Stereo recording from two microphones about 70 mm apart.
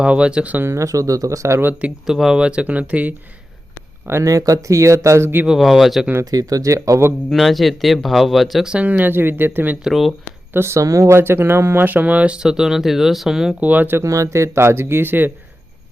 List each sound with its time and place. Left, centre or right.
0.0 s speech: centre
0.6 s speech: right
2.0 s speech: centre; by 3.2 s right
4.0 s speech: right
4.3 s speech: right
5.5 s speech: centre
6.3 s speech: right
7.3 s speech: centre
8.7 s speech: right
9.8 s speech: centre
10.5 s speech: right; by 13.6 s centre
13.6 s speech: right
14.0 s speech: right